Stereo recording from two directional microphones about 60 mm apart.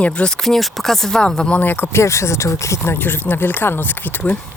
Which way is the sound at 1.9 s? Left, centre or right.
Left.